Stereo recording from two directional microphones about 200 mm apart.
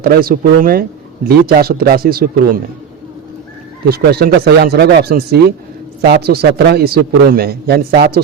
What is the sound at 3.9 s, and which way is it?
A man's voice, 50° right (ahead or behind).